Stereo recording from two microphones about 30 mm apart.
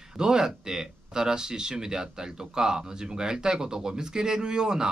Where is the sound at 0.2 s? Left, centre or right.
Right.